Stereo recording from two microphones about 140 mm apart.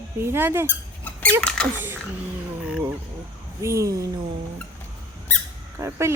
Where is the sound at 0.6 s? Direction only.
10° left (ahead or behind).